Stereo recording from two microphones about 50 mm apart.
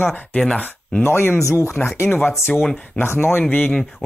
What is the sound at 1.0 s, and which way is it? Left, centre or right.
Speech, left.